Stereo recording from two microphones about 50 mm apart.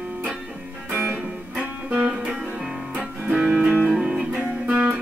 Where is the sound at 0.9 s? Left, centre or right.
Right.